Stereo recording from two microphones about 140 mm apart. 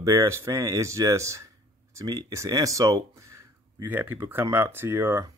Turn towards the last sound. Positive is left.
turn(degrees=-20)  # may be behind; listen again after turning